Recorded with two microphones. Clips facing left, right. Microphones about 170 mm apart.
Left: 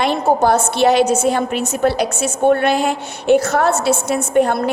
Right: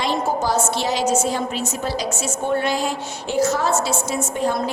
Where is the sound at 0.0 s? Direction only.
60° left (ahead or behind).